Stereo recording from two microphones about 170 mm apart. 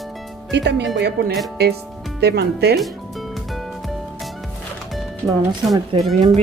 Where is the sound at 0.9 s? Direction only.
70° right (ahead or behind).